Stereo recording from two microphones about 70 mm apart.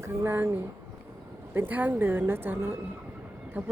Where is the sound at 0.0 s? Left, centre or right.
Right.